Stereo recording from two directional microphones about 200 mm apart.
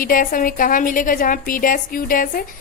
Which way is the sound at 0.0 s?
45° left (ahead or behind).